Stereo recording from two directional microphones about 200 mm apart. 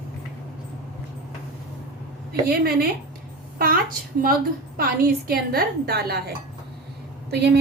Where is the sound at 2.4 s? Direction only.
50° right (ahead or behind).